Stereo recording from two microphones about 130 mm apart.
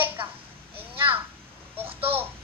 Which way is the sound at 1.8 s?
45° right (ahead or behind).